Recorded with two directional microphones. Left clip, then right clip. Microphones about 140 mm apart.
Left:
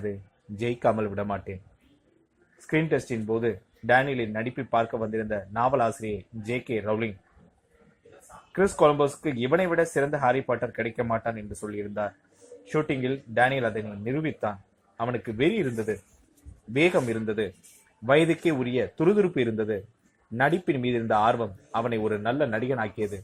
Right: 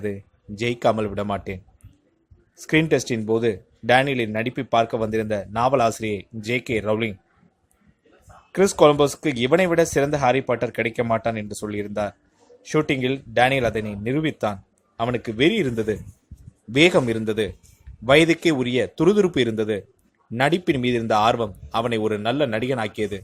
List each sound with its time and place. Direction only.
0.6 s speech: 20° right (ahead or behind)
2.8 s speech: 30° right (ahead or behind)
8.5 s speech: 40° right (ahead or behind); by 23.2 s 25° right (ahead or behind)